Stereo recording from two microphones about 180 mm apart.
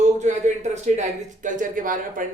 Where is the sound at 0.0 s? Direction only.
40° right (ahead or behind).